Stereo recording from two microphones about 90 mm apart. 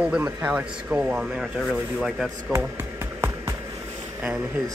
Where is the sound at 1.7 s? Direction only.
Centre (ahead or behind).